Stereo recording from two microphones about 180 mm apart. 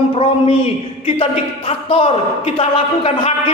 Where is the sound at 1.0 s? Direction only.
30° left (ahead or behind).